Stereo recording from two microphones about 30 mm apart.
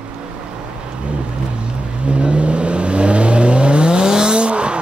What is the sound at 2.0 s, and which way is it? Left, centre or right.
Vehicle, right.